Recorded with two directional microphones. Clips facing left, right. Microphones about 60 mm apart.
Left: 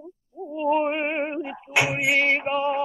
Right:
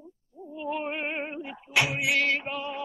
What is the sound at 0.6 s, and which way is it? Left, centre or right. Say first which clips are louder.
Female singing: left 9 dB; left.